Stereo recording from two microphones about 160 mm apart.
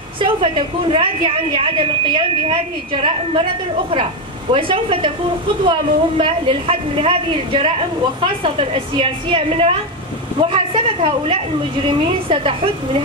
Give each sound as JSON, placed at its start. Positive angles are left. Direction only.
{"t": 0.2, "sound": "a woman's voice", "side_deg": -35}
{"t": 4.6, "sound": "a woman's voice", "side_deg": -35}